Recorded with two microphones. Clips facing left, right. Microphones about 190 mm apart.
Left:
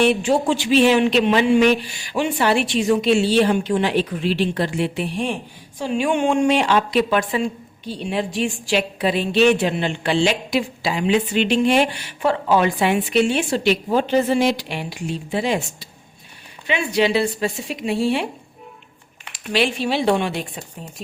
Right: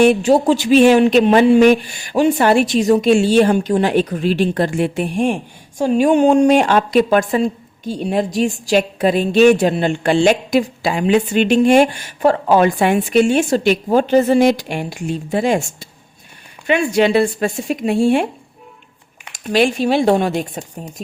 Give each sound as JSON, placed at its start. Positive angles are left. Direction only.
{"t": 0.0, "sound": "speech", "side_deg": -40}
{"t": 19.3, "sound": "speech", "side_deg": -45}